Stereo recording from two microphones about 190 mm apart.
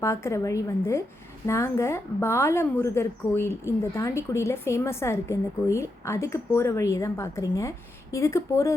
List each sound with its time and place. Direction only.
0.0 s a woman's voice: 15° left (ahead or behind)